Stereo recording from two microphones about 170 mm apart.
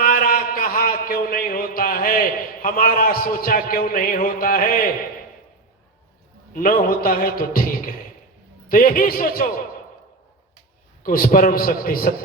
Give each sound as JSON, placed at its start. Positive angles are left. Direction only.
{"t": 0.0, "sound": "a man's voice", "side_deg": 55}
{"t": 6.6, "sound": "a man's voice", "side_deg": 55}
{"t": 11.0, "sound": "a man's voice", "side_deg": 60}